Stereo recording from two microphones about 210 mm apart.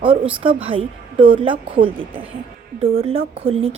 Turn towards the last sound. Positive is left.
turn(degrees=-30)  # may be behind; listen again after turning